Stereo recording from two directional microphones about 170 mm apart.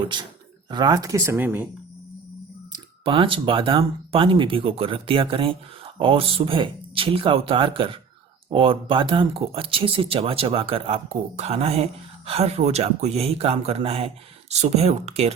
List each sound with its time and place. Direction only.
0.1 s speech: 25° right (ahead or behind); by 1.6 s 10° right (ahead or behind)
2.7 s speech: 30° right (ahead or behind)